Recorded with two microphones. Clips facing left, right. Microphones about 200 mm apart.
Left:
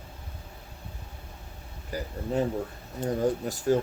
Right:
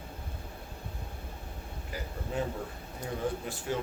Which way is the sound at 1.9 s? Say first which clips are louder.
Left 6 dB; 40° left (ahead or behind).